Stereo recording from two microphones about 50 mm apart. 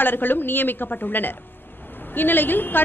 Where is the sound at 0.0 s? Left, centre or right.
Left.